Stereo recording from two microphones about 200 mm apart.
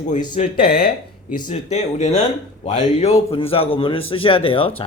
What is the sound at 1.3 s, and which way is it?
Speech, 40° left (ahead or behind).